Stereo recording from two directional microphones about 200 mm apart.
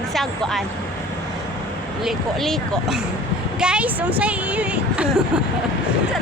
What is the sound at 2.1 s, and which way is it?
A woman's voice, centre (ahead or behind).